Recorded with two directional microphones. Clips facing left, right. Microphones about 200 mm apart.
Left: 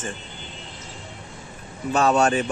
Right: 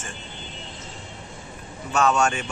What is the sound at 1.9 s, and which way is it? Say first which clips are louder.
Speech: left 2 dB; 35° left (ahead or behind).